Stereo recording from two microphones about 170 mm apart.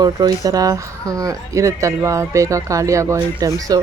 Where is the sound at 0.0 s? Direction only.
25° right (ahead or behind).